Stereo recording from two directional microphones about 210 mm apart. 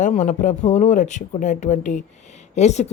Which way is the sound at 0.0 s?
35° left (ahead or behind).